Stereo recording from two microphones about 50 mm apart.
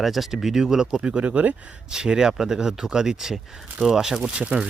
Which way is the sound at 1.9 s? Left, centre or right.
Centre.